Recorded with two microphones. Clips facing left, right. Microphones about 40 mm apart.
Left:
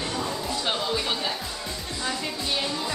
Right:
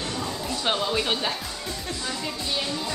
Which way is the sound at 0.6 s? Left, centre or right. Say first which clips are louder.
Right 4 dB; centre.